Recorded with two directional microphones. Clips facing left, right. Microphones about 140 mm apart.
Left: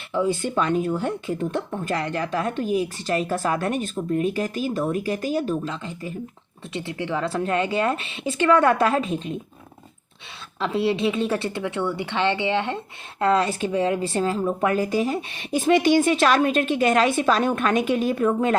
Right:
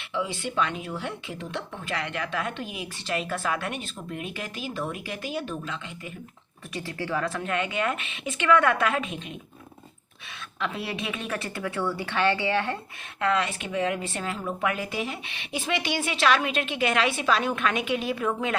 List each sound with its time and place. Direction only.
0.1 s speech: 45° left (ahead or behind)
6.7 s speech: 20° left (ahead or behind); by 9.3 s 35° left (ahead or behind)
10.6 s a woman's voice: 30° left (ahead or behind)
13.1 s speech: 35° left (ahead or behind)